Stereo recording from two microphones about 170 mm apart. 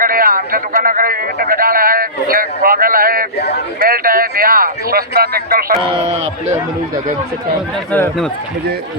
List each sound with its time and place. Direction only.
0.0 s speech: 55° right (ahead or behind)
5.8 s speech: 30° right (ahead or behind)
7.9 s speech: 10° left (ahead or behind)